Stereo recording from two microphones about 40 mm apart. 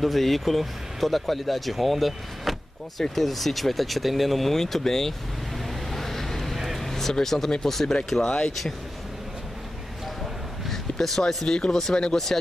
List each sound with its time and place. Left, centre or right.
0.0 s speech: centre
5.9 s a sound: centre
7.6 s speech: centre
8.3 s speech: left
10.7 s speech: centre
11.5 s speech: left